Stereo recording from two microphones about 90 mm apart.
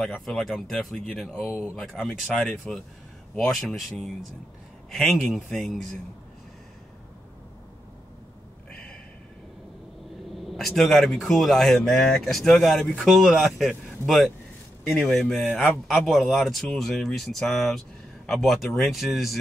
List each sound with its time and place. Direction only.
0.0 s speech: 5° left (ahead or behind)
10.3 s speech: centre (ahead or behind)